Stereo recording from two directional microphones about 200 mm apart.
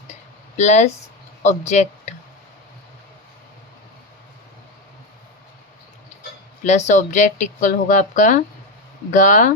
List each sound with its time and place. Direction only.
0.1 s a sound: 35° left (ahead or behind)
1.4 s speech: 35° left (ahead or behind)
6.7 s speech: 35° left (ahead or behind)